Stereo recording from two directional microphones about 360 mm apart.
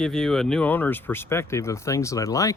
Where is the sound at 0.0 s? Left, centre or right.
Centre.